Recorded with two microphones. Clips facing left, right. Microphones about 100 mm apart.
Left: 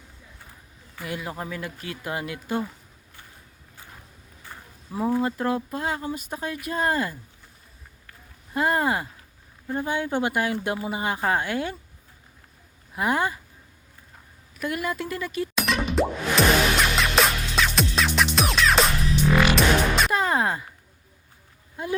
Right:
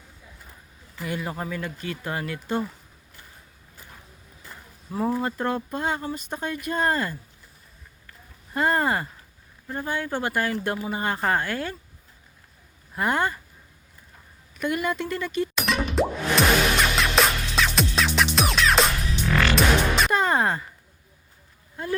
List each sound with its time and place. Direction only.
1.0 s speech: centre (ahead or behind)
4.9 s speech: centre (ahead or behind)
8.5 s speech: 5° left (ahead or behind)
9.6 s speech: 15° left (ahead or behind)
13.0 s speech: 5° left (ahead or behind)
14.6 s music: centre (ahead or behind)
21.8 s speech: 15° left (ahead or behind)